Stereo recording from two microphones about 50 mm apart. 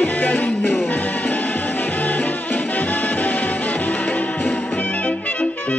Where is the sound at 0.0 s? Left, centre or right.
Left.